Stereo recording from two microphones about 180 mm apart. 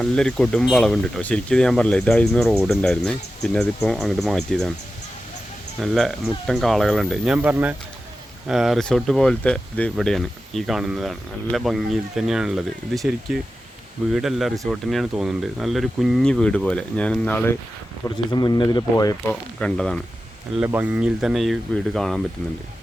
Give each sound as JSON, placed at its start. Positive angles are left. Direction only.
{"t": 0.0, "sound": "speech", "side_deg": 5}
{"t": 5.8, "sound": "speech", "side_deg": 0}
{"t": 18.3, "sound": "speech", "side_deg": 25}
{"t": 19.3, "sound": "speech", "side_deg": 5}
{"t": 20.6, "sound": "speech", "side_deg": -10}